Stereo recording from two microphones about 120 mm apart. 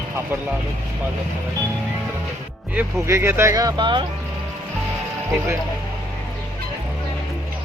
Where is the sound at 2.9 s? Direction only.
20° right (ahead or behind); by 4.0 s 40° right (ahead or behind).